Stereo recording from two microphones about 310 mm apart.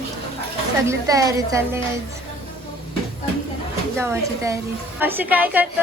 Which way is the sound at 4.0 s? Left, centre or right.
Centre.